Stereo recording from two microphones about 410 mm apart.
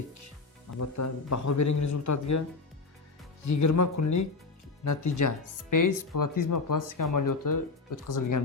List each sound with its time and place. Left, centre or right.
0.8 s a man's voice: left
3.5 s speech: left